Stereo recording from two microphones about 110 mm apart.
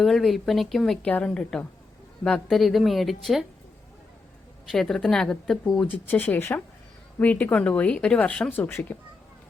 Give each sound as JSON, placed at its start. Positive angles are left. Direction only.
{"t": 0.0, "sound": "a woman's voice", "side_deg": 0}
{"t": 4.7, "sound": "a woman's voice", "side_deg": 5}
{"t": 5.9, "sound": "speech", "side_deg": 15}